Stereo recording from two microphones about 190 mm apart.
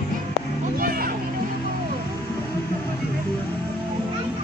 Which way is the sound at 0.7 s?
50° right (ahead or behind).